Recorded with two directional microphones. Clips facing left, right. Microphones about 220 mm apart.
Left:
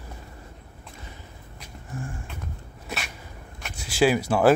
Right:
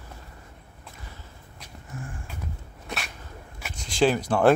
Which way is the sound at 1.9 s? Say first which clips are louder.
Left 4 dB; 30° left (ahead or behind).